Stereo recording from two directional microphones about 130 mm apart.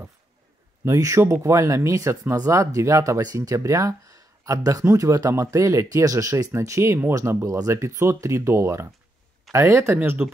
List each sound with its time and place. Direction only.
0.8 s speech: 25° right (ahead or behind)